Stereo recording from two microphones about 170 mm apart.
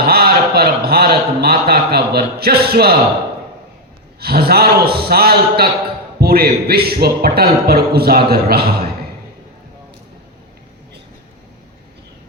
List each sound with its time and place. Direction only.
0.0 s a man's voice: 65° right (ahead or behind)
4.2 s a man's voice: 65° right (ahead or behind)